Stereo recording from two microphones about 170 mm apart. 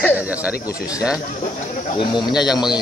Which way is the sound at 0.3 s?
10° right (ahead or behind).